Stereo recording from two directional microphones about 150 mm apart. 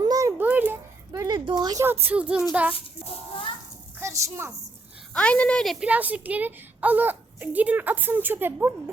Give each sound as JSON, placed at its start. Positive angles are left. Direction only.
{"t": 0.0, "sound": "a sound", "side_deg": -25}
{"t": 1.5, "sound": "a woman's voice", "side_deg": -30}
{"t": 1.8, "sound": "a woman's voice", "side_deg": -15}
{"t": 4.0, "sound": "a child's voice", "side_deg": -20}
{"t": 5.1, "sound": "speech", "side_deg": 10}
{"t": 5.8, "sound": "a woman's voice", "side_deg": -10}